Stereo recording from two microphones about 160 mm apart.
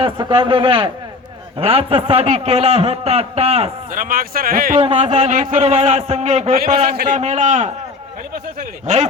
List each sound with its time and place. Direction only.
0.0 s a man's voice: 30° right (ahead or behind)
3.9 s speech: 60° right (ahead or behind)
4.8 s a man's voice: 35° right (ahead or behind)
8.9 s a man's voice: 45° right (ahead or behind)